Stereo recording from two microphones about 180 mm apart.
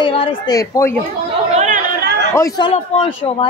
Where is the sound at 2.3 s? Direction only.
20° left (ahead or behind).